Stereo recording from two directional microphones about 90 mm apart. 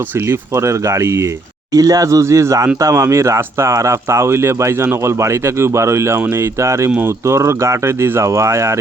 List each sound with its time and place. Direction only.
0.3 s speech: 30° right (ahead or behind)